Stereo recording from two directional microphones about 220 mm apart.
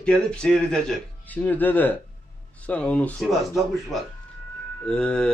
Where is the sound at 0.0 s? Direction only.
5° left (ahead or behind).